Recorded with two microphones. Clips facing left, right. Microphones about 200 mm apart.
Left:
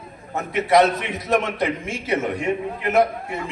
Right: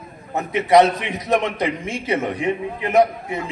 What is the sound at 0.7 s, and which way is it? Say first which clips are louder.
A man's voice: right 3 dB; 20° right (ahead or behind).